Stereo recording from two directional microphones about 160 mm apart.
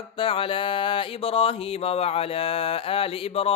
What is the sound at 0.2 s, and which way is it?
Speech, 35° left (ahead or behind).